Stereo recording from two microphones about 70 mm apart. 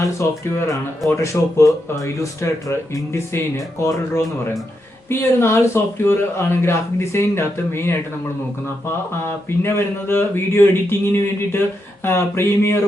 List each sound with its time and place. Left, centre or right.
0.0 s speech: left
9.7 s speech: left